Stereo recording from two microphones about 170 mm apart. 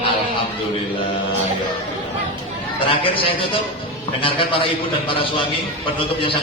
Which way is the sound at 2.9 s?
30° left (ahead or behind).